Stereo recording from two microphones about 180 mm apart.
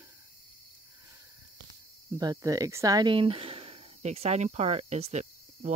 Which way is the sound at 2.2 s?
20° right (ahead or behind).